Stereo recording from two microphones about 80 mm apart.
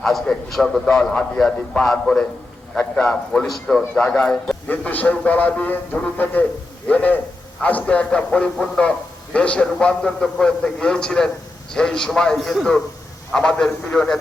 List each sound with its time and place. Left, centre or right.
0.0 s a man's voice: centre
3.4 s a man's voice: centre
4.7 s a man's voice: left